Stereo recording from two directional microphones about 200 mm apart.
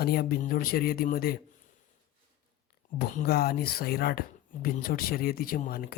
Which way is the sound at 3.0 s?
45° left (ahead or behind).